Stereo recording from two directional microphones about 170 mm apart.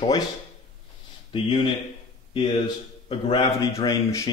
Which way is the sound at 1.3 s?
30° left (ahead or behind).